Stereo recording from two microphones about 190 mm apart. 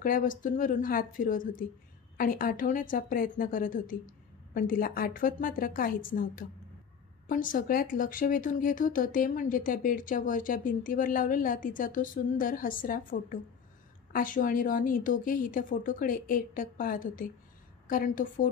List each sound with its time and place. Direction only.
0.0 s speech: 45° left (ahead or behind)